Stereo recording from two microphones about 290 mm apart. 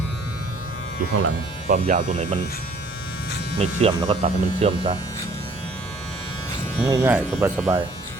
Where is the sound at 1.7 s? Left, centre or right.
Right.